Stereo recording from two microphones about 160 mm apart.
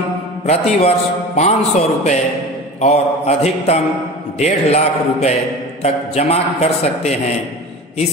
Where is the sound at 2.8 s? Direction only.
40° left (ahead or behind).